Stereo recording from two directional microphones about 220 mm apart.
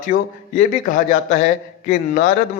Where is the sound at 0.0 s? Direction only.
40° left (ahead or behind).